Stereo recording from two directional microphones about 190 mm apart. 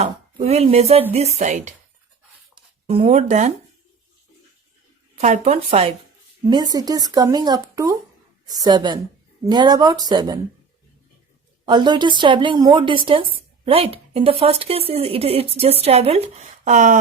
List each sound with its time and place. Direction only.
0.0 s a woman's voice: 35° right (ahead or behind)
2.8 s a woman's voice: 30° right (ahead or behind)
5.1 s a woman's voice: 40° right (ahead or behind)
6.4 s speech: 20° right (ahead or behind)
11.6 s a woman's voice: 25° right (ahead or behind); by 17.0 s 40° right (ahead or behind)